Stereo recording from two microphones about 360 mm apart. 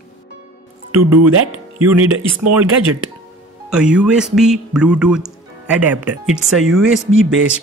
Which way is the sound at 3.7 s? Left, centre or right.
Centre.